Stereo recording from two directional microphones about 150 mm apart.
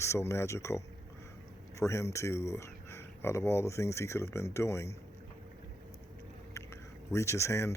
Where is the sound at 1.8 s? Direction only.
20° left (ahead or behind).